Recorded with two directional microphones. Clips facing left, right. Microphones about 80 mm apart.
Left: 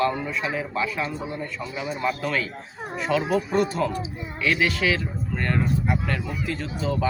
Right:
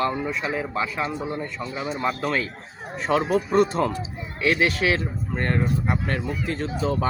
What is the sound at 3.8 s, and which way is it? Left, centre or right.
Speech, right.